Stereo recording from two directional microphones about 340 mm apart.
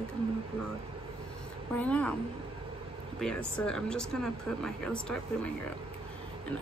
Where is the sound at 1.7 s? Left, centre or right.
Centre.